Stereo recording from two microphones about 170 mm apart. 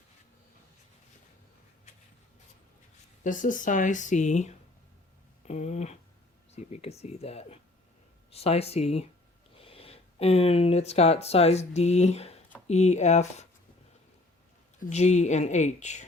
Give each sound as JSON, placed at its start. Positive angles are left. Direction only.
{"t": 3.2, "sound": "speech", "side_deg": 50}
{"t": 5.5, "sound": "a sound", "side_deg": 40}
{"t": 6.5, "sound": "speech", "side_deg": 40}
{"t": 14.8, "sound": "speech", "side_deg": 40}